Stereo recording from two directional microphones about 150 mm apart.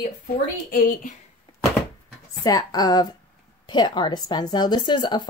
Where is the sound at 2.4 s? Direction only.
25° left (ahead or behind).